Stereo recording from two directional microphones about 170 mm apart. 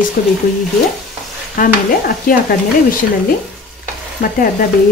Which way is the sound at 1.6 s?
50° left (ahead or behind).